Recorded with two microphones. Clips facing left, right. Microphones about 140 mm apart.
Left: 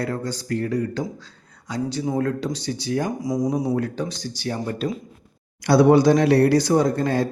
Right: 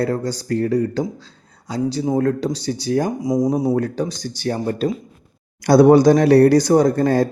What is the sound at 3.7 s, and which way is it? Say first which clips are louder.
Speech: right 4 dB; 40° right (ahead or behind).